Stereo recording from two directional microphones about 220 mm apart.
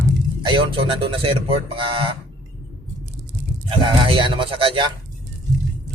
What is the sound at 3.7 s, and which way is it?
Speech, 20° right (ahead or behind).